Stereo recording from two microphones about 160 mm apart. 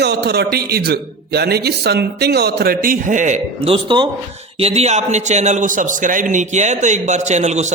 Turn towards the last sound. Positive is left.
turn(degrees=-45)  # may be behind; listen again after turning